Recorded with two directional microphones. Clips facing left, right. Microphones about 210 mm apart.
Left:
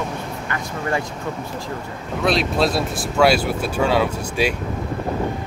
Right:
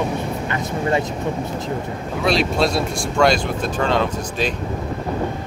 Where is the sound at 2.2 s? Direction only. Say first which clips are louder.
Even; centre (ahead or behind).